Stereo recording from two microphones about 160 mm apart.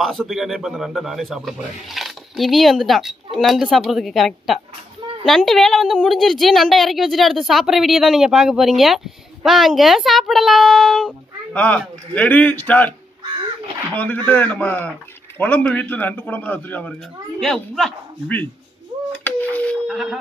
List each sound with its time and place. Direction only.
0.0 s a woman's voice: centre (ahead or behind)
13.9 s a man's voice: 10° left (ahead or behind)
19.2 s a sound: 10° left (ahead or behind)
19.9 s speech: 5° right (ahead or behind)